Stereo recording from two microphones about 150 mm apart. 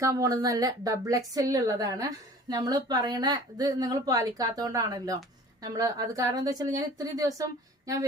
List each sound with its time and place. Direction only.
0.0 s a woman's voice: 20° right (ahead or behind)